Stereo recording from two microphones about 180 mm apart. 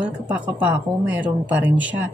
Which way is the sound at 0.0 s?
10° right (ahead or behind).